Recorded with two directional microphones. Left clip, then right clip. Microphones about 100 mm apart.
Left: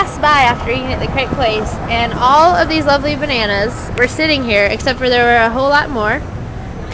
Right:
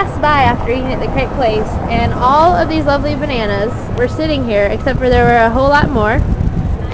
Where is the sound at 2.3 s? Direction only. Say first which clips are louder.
Left 1 dB; 40° left (ahead or behind).